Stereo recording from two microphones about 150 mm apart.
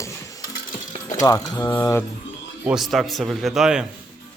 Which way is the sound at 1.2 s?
25° left (ahead or behind).